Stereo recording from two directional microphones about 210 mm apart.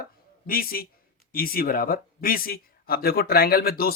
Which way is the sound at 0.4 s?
45° left (ahead or behind).